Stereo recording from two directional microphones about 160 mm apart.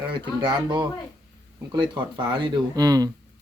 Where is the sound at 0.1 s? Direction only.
30° right (ahead or behind).